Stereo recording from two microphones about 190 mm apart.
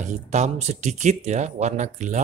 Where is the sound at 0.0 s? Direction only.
40° right (ahead or behind).